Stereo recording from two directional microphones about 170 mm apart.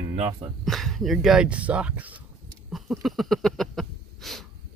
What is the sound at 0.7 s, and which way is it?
Speech, centre (ahead or behind).